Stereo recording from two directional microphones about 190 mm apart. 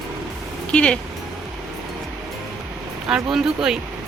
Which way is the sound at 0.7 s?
5° left (ahead or behind).